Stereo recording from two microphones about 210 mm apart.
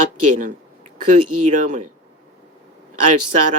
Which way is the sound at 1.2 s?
90° right.